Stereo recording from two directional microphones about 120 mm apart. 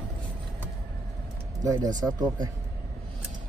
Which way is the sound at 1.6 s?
30° right (ahead or behind).